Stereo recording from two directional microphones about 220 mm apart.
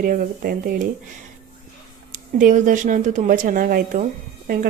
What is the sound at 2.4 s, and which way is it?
Speech, 35° right (ahead or behind).